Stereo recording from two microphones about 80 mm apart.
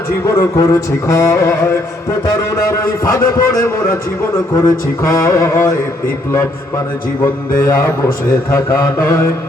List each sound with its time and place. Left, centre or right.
0.3 s a man's voice: left
5.0 s a man's voice: left
7.2 s a man's voice: left